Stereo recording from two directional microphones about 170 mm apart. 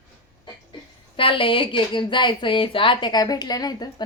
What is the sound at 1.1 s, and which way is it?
Speech, 30° left (ahead or behind).